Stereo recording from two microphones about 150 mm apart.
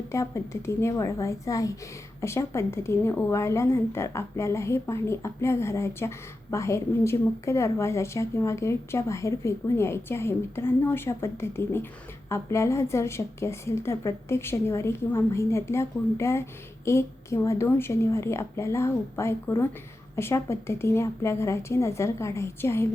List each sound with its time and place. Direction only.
0.1 s a woman's voice: 20° left (ahead or behind)